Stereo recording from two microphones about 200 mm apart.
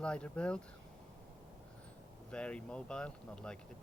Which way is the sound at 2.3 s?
5° left (ahead or behind).